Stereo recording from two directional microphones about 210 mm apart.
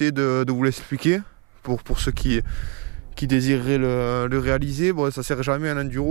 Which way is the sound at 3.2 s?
10° right (ahead or behind).